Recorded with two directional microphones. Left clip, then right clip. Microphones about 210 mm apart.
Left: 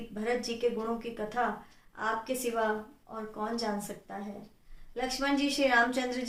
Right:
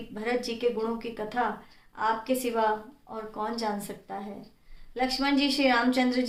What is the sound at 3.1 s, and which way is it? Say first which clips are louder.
A woman's voice: right 3 dB; 35° right (ahead or behind).